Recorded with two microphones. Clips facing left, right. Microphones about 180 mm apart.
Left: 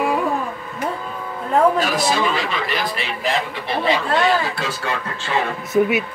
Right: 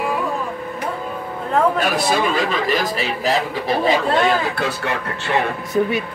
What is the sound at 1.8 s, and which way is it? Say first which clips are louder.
Speech: right 1 dB; 55° right (ahead or behind).